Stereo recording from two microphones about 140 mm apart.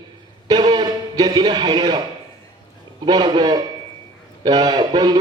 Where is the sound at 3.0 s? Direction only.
30° right (ahead or behind).